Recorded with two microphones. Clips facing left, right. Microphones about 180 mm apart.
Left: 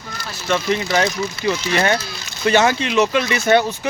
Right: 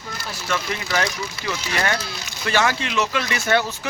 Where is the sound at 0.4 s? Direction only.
25° left (ahead or behind).